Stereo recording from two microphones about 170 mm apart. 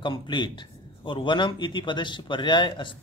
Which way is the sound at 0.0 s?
30° left (ahead or behind).